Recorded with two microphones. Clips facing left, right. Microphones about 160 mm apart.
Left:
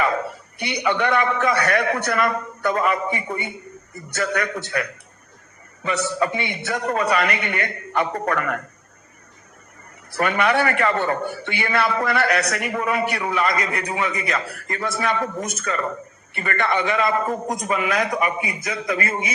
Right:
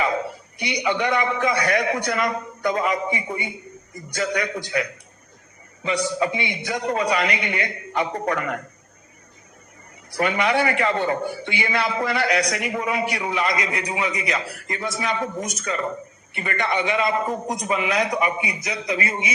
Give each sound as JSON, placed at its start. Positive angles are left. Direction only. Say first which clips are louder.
{"t": 0.3, "sound": "a man's voice", "louder": "even", "side_deg": 60}
{"t": 10.1, "sound": "a man's voice", "louder": "left 1 dB", "side_deg": 55}